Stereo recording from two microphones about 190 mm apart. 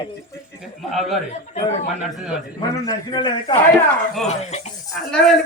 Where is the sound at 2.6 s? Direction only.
20° left (ahead or behind).